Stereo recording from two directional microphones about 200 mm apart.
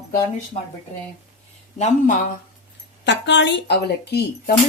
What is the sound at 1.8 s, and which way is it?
Speech, 40° left (ahead or behind).